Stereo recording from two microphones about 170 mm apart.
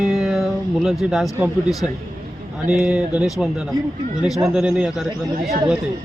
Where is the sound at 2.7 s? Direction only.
5° right (ahead or behind).